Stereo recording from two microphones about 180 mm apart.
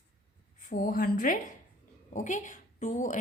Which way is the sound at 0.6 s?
50° left (ahead or behind).